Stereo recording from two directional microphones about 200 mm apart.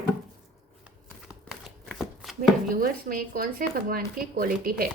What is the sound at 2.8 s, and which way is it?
Speech, 45° right (ahead or behind).